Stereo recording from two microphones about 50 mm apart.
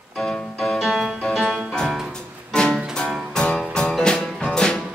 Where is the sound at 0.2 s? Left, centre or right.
Centre.